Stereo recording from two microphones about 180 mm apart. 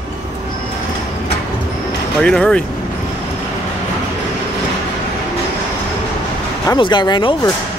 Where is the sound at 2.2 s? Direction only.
5° left (ahead or behind).